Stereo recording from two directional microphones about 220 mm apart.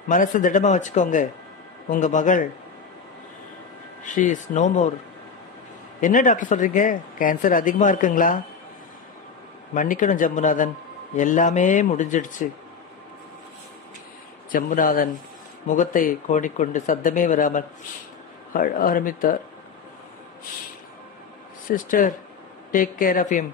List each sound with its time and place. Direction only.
0.1 s speech: 35° left (ahead or behind)
4.0 s speech: 35° left (ahead or behind)
5.9 s speech: 35° left (ahead or behind)
9.8 s speech: 35° left (ahead or behind)
14.5 s speech: 40° left (ahead or behind)
21.7 s speech: 40° left (ahead or behind)